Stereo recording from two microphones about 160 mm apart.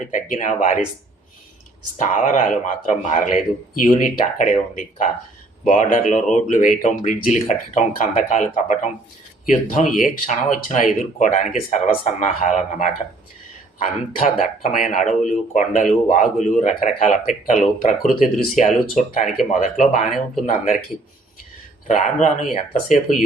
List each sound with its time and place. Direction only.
0.0 s speech: 50° left (ahead or behind)
2.0 s speech: 50° left (ahead or behind)
21.8 s speech: 50° left (ahead or behind)